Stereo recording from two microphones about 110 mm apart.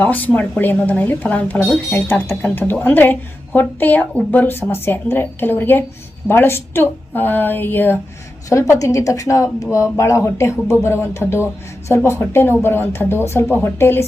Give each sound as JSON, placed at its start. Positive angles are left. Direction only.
{"t": 0.0, "sound": "speech", "side_deg": 15}